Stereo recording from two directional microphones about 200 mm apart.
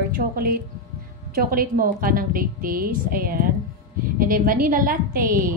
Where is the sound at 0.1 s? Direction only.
45° right (ahead or behind).